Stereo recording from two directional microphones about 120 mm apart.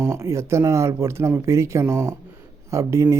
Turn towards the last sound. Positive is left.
turn(degrees=-25)  # may be behind; listen again after turning